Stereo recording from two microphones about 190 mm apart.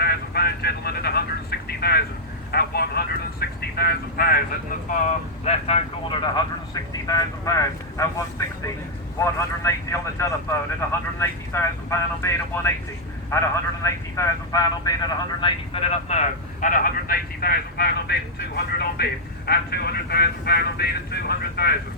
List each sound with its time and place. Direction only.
0.0 s vehicle: 55° left (ahead or behind)
3.8 s speech: 55° left (ahead or behind)
5.5 s speech: 35° left (ahead or behind); by 21.8 s 55° left (ahead or behind)